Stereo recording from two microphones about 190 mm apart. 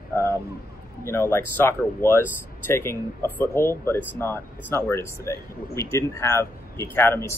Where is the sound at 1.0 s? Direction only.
10° left (ahead or behind).